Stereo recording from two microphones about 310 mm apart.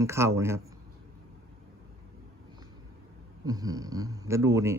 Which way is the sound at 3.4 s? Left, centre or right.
Centre.